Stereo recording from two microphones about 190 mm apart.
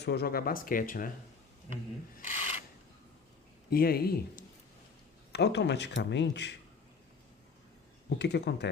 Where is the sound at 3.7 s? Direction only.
50° left (ahead or behind).